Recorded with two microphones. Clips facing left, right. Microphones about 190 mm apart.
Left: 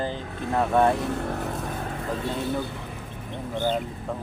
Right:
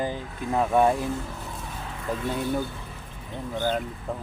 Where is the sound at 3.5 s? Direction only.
5° right (ahead or behind).